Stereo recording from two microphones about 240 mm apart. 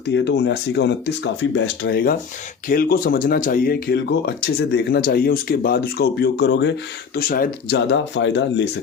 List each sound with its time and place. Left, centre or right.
0.1 s speech: left